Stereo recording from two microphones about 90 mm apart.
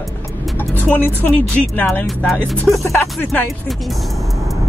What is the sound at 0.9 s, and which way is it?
Speech, 20° left (ahead or behind).